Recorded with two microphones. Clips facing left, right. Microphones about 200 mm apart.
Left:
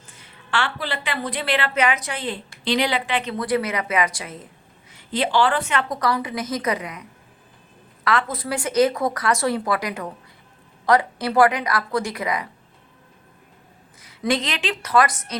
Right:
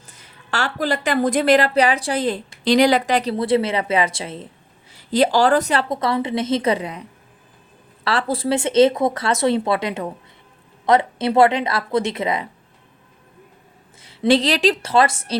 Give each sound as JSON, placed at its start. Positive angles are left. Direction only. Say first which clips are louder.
{"t": 0.1, "sound": "a woman's voice", "louder": "left 1 dB", "side_deg": -40}
{"t": 5.9, "sound": "speech", "louder": "right 3 dB", "side_deg": -25}
{"t": 8.0, "sound": "speech", "louder": "right 3 dB", "side_deg": -30}
{"t": 14.0, "sound": "speech", "louder": "right 7 dB", "side_deg": -30}